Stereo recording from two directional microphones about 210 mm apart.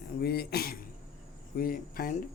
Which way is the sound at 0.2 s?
50° left (ahead or behind).